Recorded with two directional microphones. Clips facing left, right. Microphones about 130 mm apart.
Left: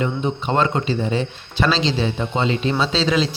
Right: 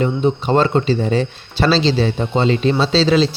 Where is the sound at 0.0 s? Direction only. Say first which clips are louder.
Right 5 dB; 35° right (ahead or behind).